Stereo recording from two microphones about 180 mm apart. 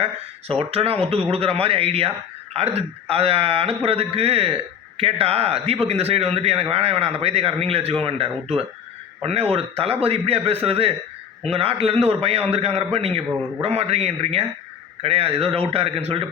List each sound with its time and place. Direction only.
0.7 s a man's voice: 35° right (ahead or behind)